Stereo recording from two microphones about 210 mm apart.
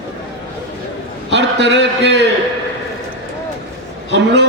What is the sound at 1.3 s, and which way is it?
Speech, 55° right (ahead or behind).